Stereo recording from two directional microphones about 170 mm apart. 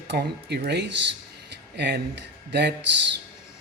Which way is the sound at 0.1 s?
80° right.